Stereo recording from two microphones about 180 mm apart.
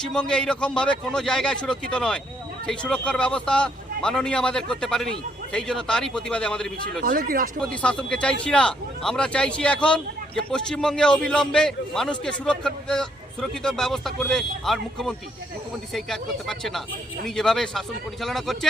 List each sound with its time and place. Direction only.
0.0 s speech: 5° left (ahead or behind)
7.0 s speech: 55° right (ahead or behind)
7.6 s speech: 5° left (ahead or behind)